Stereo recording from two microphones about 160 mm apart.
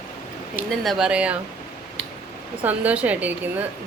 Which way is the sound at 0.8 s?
Centre (ahead or behind).